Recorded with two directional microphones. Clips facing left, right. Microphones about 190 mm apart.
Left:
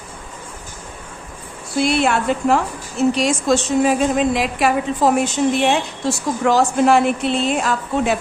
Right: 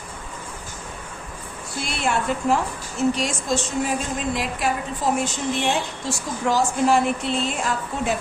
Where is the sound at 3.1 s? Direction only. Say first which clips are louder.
Left 7 dB; 85° left.